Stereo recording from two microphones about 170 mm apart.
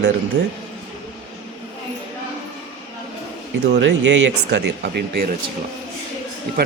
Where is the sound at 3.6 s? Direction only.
90° right.